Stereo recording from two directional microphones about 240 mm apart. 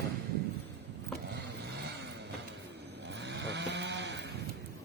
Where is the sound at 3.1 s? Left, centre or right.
Right.